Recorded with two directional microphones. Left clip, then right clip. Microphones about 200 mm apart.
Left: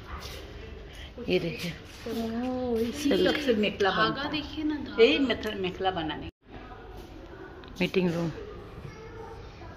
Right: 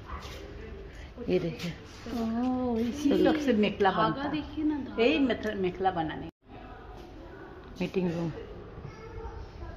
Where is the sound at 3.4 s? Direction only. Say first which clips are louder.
Even; 50° right (ahead or behind).